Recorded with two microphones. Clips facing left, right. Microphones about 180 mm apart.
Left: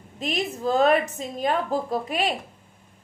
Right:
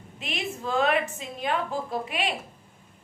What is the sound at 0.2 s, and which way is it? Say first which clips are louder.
A woman's voice: left 6 dB; 40° left (ahead or behind).